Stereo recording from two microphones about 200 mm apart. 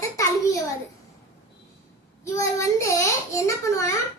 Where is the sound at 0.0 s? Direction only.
15° left (ahead or behind).